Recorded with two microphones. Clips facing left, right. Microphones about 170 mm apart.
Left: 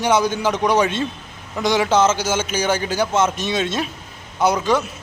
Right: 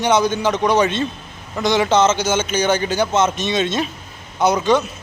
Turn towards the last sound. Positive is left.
turn(degrees=5)  # may be behind; listen again after turning